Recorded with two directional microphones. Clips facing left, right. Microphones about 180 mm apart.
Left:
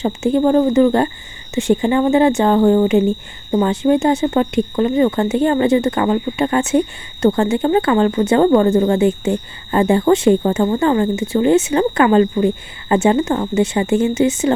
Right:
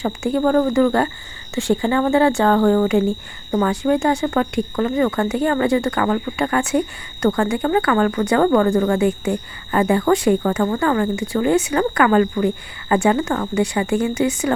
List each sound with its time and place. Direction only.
0.0 s speech: 20° left (ahead or behind)